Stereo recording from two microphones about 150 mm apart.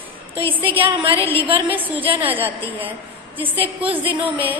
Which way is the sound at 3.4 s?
10° right (ahead or behind).